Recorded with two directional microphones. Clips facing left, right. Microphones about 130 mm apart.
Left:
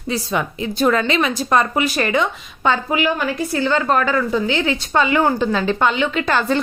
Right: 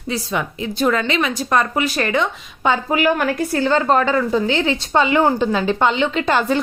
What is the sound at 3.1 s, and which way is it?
Speech, 60° right (ahead or behind).